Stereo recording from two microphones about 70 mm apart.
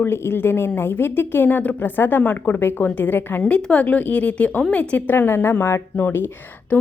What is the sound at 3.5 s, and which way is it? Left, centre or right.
A woman's voice, centre.